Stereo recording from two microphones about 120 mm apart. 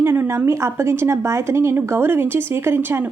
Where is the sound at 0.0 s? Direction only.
20° right (ahead or behind).